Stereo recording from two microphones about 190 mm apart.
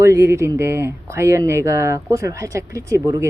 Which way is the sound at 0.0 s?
15° right (ahead or behind).